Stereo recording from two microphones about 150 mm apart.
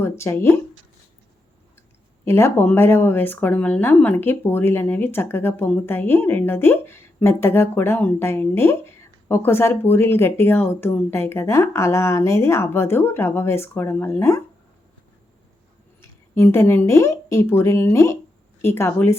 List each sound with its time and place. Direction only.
0.0 s speech: 15° left (ahead or behind)
2.2 s speech: 15° left (ahead or behind)
16.0 s speech: 15° left (ahead or behind)